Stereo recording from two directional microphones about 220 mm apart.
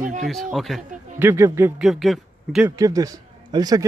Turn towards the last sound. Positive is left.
turn(degrees=-20)  # may be behind; listen again after turning